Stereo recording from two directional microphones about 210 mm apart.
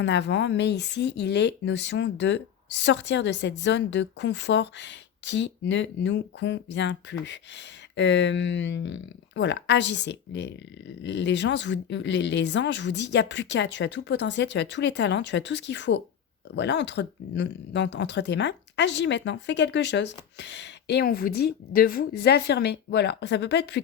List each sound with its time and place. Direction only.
0.0 s speech: 55° left (ahead or behind)